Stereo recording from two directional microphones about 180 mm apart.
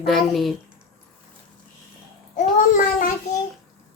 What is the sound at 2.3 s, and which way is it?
Child singing, 50° left (ahead or behind).